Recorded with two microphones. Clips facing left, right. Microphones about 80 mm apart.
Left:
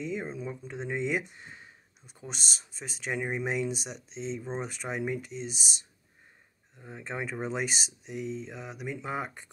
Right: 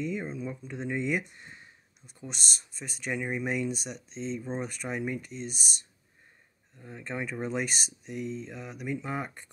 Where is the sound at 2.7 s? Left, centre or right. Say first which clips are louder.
Even; left.